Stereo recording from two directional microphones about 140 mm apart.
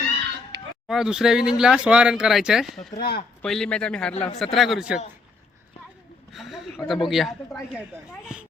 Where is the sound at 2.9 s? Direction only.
90° left.